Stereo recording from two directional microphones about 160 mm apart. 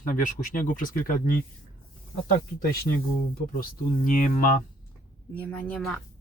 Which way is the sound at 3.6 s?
60° left (ahead or behind).